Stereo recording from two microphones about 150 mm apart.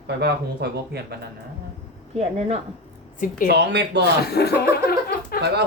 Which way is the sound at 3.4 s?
90° right.